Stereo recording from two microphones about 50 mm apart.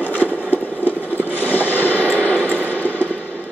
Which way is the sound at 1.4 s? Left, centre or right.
Left.